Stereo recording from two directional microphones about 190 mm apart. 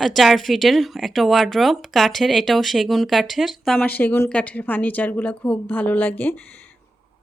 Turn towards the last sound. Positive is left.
turn(degrees=10)  # may be behind; listen again after turning